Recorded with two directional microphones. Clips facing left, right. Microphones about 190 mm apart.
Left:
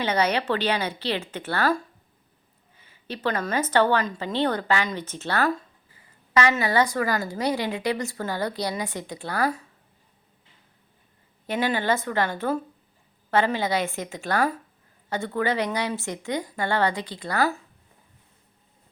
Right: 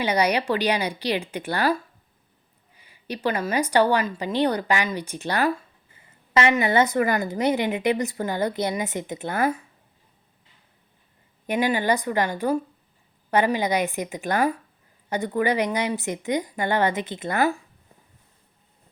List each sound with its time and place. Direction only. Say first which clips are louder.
0.0 s a woman's voice: right 2 dB; 10° right (ahead or behind)
11.4 s a woman's voice: right 2 dB; 15° right (ahead or behind)